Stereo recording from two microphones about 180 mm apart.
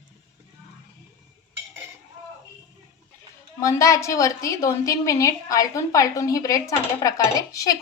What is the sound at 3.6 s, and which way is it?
A woman's voice, 15° left (ahead or behind).